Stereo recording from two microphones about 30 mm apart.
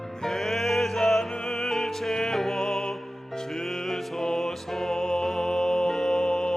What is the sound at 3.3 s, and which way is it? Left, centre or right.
Music, centre.